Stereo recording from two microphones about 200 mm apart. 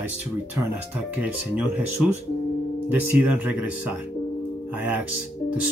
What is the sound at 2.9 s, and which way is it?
Speech, 5° right (ahead or behind).